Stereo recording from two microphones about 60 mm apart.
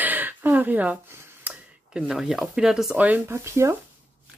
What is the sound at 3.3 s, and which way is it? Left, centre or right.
Speech, right.